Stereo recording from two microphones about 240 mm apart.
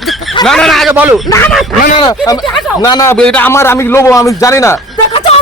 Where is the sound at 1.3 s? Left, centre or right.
Centre.